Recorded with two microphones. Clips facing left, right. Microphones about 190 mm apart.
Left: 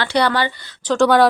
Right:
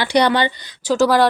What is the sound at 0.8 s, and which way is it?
Speech, 5° right (ahead or behind).